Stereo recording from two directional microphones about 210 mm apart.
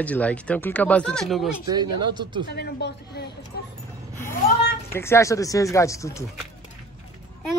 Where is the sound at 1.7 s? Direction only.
20° right (ahead or behind).